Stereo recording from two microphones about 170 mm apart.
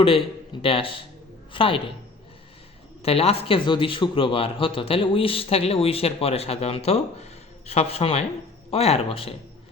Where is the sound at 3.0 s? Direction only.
35° left (ahead or behind).